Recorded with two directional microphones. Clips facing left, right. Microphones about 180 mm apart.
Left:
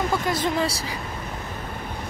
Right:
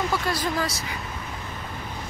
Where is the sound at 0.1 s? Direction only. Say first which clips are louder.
Left 2 dB; 20° left (ahead or behind).